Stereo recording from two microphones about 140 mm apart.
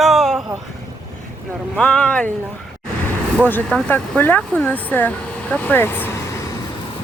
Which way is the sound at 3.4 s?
10° left (ahead or behind).